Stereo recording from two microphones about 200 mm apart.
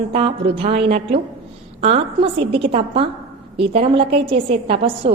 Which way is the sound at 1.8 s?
30° right (ahead or behind).